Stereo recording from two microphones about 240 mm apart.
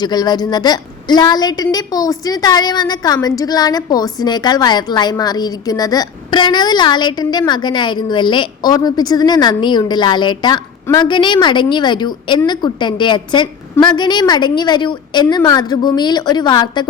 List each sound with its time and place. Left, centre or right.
0.0 s a woman's voice: centre